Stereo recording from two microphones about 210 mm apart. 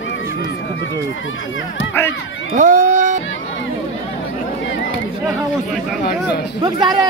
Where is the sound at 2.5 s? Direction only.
35° right (ahead or behind).